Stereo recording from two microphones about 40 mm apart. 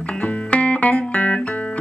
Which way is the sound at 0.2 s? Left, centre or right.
Left.